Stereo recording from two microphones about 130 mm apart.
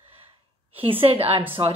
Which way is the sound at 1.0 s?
45° right (ahead or behind).